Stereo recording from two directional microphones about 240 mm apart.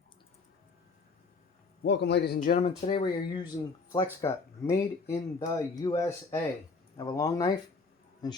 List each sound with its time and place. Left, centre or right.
1.8 s a man's voice: left
2.6 s speech: left